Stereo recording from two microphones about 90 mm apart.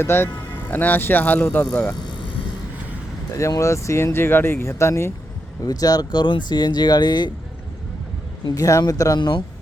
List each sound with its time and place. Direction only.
0.0 s speech: 25° left (ahead or behind)
1.7 s speech: 5° left (ahead or behind)
3.6 s speech: 35° left (ahead or behind)
5.6 s speech: 45° left (ahead or behind)
8.5 s speech: 40° left (ahead or behind)
9.1 s speech: 60° left (ahead or behind)